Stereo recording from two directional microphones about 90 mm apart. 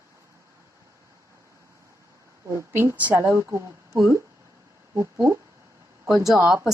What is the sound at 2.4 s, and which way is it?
Speech, 30° right (ahead or behind).